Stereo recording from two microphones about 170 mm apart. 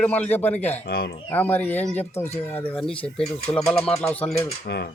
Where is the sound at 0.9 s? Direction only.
65° left (ahead or behind).